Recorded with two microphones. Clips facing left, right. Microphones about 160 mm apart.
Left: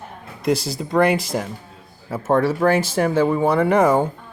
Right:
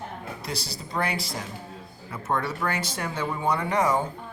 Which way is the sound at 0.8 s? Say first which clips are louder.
Left 12 dB; 60° left (ahead or behind).